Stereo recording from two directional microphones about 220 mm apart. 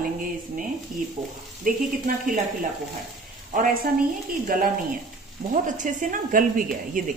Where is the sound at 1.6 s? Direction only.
35° right (ahead or behind).